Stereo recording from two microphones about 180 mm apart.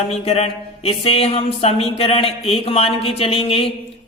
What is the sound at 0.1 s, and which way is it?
Speech, 35° left (ahead or behind).